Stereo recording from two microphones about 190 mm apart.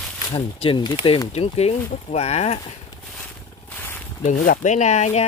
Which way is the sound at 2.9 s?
10° left (ahead or behind).